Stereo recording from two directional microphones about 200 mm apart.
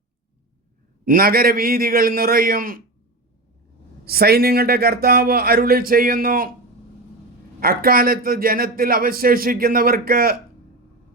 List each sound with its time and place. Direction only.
1.0 s a man's voice: 45° right (ahead or behind)
4.0 s a man's voice: 50° right (ahead or behind)
7.6 s a man's voice: 50° right (ahead or behind)